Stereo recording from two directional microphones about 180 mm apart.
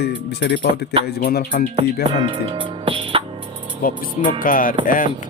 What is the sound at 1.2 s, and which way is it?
Music, 50° left (ahead or behind).